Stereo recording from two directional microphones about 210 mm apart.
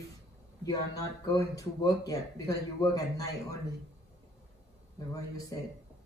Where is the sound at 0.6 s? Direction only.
15° left (ahead or behind).